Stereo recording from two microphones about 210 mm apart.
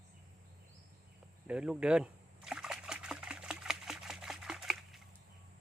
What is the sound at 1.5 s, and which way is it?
Trickle, 5° right (ahead or behind).